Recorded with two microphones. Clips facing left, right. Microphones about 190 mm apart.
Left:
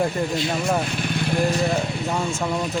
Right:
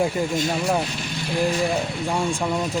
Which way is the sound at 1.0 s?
60° left (ahead or behind).